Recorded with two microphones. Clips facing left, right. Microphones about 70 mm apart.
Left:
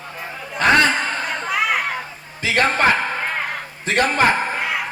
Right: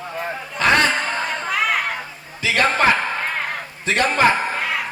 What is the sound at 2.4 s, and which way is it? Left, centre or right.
Speech, left.